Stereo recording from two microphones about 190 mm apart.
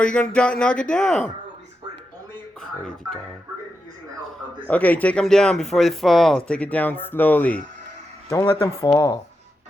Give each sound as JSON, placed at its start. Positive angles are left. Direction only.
{"t": 0.0, "sound": "speech", "side_deg": 5}
{"t": 4.6, "sound": "speech", "side_deg": 10}
{"t": 8.3, "sound": "speech", "side_deg": 20}